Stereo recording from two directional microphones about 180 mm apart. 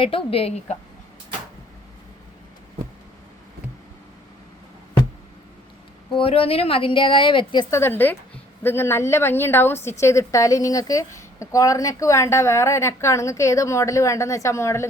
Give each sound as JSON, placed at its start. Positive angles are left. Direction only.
{"t": 0.0, "sound": "a woman's voice", "side_deg": 30}
{"t": 6.1, "sound": "a woman's voice", "side_deg": 30}
{"t": 7.8, "sound": "a woman's voice", "side_deg": 10}